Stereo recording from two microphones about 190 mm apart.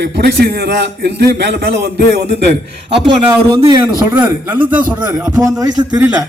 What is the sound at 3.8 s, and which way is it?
A man's voice, 10° right (ahead or behind).